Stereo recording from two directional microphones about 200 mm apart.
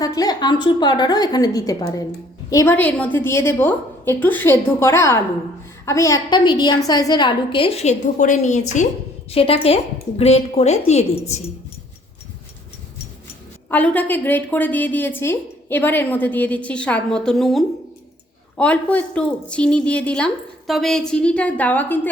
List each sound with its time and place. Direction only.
0.0 s a woman's voice: 20° left (ahead or behind); by 11.4 s 35° left (ahead or behind)
13.7 s a woman's voice: 10° left (ahead or behind)